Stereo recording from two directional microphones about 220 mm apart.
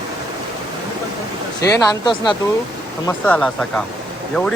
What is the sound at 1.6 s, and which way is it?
Speech, 20° left (ahead or behind).